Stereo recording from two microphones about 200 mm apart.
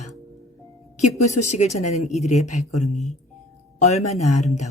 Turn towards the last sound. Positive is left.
turn(degrees=35)  # may be behind; listen again after turning